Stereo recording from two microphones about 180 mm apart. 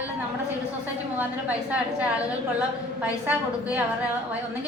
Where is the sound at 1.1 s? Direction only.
10° right (ahead or behind).